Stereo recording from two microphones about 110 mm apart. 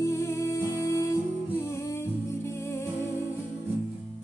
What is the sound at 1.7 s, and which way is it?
Humming, 25° left (ahead or behind).